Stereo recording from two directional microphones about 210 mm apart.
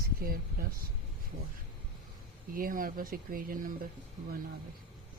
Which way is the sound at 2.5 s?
40° right (ahead or behind).